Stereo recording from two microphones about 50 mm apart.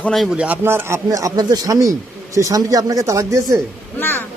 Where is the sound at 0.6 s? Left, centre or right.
Right.